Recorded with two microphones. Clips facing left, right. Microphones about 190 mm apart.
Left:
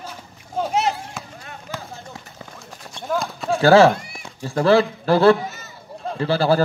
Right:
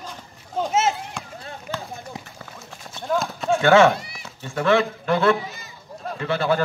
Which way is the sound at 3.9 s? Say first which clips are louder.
Right 1 dB; 50° left (ahead or behind).